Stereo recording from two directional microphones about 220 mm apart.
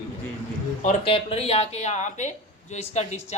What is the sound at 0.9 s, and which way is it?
Speech, 25° left (ahead or behind).